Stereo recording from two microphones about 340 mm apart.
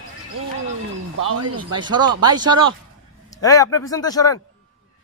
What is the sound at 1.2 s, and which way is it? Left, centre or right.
Speech, right.